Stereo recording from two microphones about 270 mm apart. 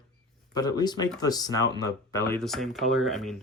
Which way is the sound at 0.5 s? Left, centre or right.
Centre.